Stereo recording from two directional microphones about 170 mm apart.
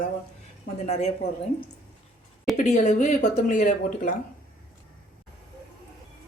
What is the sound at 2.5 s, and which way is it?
Speech, 40° left (ahead or behind).